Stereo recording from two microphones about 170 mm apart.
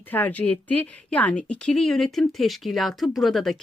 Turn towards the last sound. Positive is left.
turn(degrees=0)  # may be behind; listen again after turning